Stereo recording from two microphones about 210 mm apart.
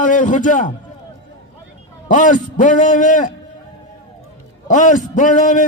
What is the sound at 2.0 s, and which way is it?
A man's voice, 40° left (ahead or behind).